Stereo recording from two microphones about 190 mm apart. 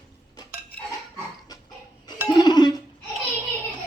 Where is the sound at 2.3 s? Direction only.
20° left (ahead or behind).